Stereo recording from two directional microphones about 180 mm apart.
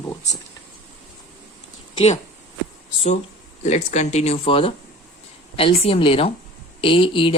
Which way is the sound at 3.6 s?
40° left (ahead or behind).